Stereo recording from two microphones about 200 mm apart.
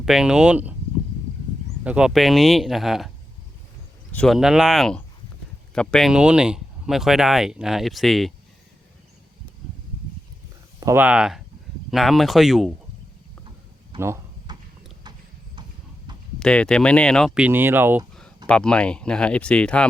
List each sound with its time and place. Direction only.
0.0 s speech: 5° right (ahead or behind)
1.8 s speech: 5° right (ahead or behind)
4.1 s speech: 5° left (ahead or behind)
10.8 s speech: 15° right (ahead or behind)
14.0 s a sound: 15° right (ahead or behind)
16.1 s a sound: 20° right (ahead or behind)
16.4 s speech: 5° left (ahead or behind); by 18.0 s 10° right (ahead or behind)
18.4 s speech: 5° left (ahead or behind)